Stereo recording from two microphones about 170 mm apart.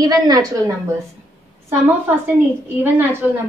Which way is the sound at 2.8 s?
10° right (ahead or behind).